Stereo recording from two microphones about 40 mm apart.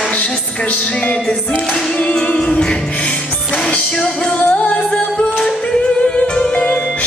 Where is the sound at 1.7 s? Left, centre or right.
Left.